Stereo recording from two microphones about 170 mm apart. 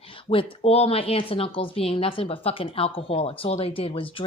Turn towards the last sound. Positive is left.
turn(degrees=30)  # may be behind; listen again after turning